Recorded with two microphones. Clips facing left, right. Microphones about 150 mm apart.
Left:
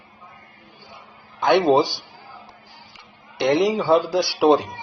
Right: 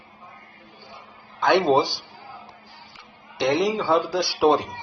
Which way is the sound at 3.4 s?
20° left (ahead or behind).